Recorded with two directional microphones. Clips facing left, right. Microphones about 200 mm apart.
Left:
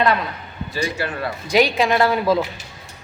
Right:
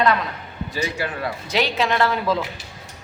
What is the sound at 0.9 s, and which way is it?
Speech, 15° right (ahead or behind).